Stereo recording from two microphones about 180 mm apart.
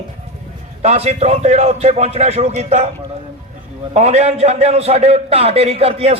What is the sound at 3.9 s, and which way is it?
A man's voice, 35° right (ahead or behind).